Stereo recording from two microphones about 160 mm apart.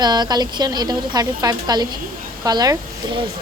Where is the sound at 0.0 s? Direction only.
25° right (ahead or behind).